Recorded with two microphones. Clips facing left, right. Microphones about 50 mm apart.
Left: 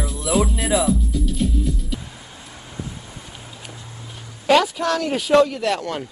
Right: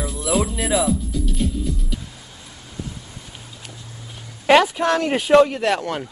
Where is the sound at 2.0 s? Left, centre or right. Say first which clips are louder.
Left 1 dB; centre.